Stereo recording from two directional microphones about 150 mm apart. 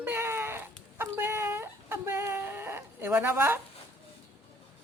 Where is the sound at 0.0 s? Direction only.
15° right (ahead or behind).